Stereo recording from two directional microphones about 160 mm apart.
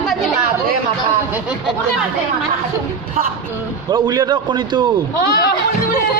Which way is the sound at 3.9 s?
30° right (ahead or behind).